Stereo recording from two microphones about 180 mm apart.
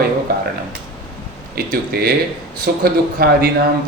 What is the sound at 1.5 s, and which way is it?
A man's voice, 55° right (ahead or behind).